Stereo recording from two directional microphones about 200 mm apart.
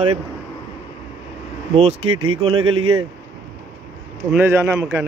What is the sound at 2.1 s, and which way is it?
Speech, 90° right.